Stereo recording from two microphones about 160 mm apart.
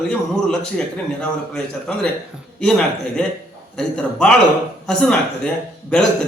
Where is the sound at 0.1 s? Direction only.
5° left (ahead or behind).